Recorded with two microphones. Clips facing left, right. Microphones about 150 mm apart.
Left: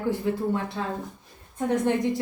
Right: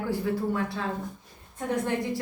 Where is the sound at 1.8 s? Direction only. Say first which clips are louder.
Left 5 dB; 20° left (ahead or behind).